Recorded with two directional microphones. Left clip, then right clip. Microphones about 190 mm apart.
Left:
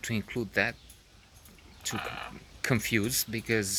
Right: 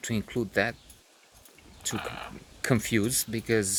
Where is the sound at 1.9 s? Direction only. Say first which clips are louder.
Even; centre (ahead or behind).